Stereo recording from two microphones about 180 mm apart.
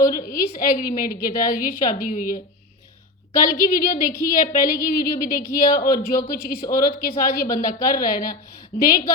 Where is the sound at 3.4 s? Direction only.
55° left (ahead or behind).